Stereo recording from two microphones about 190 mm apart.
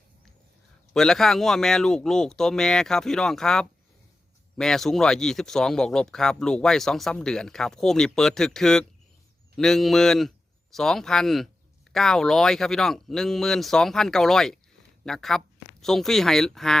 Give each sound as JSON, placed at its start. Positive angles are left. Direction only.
{"t": 0.9, "sound": "speech", "side_deg": 0}